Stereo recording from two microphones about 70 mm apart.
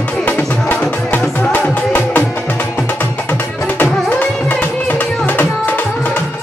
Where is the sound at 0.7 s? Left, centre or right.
Left.